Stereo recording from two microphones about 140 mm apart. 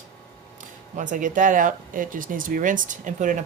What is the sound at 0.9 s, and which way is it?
Speech, 65° right (ahead or behind).